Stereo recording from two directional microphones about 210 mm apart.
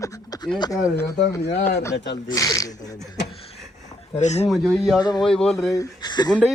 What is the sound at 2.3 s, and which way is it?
Speech, 15° left (ahead or behind).